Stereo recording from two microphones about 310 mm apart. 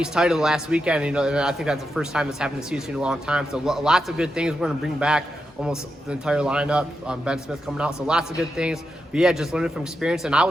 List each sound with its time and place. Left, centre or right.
0.0 s a man's voice: centre